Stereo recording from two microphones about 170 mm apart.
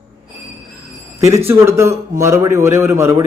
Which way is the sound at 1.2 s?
15° right (ahead or behind).